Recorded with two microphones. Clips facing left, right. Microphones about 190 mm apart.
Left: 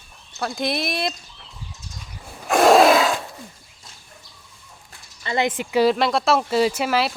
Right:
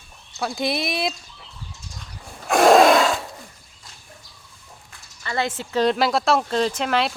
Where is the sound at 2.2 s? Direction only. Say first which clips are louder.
Even; centre (ahead or behind).